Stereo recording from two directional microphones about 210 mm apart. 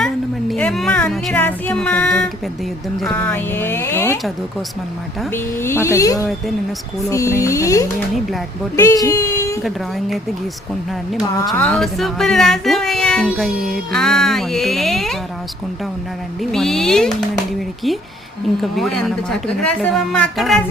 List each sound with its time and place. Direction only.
0.5 s speech: centre (ahead or behind)
5.3 s speech: 10° left (ahead or behind)
11.4 s speech: 5° left (ahead or behind)
16.4 s speech: centre (ahead or behind)
18.6 s speech: centre (ahead or behind)